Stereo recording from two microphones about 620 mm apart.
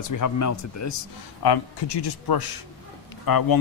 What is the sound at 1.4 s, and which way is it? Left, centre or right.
Speech, left.